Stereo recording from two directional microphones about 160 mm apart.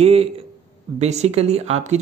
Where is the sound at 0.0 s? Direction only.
40° right (ahead or behind).